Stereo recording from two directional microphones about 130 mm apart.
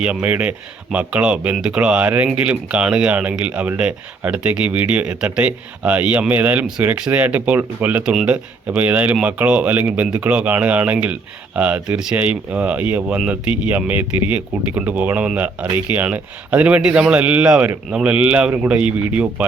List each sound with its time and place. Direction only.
0.0 s speech: 10° right (ahead or behind)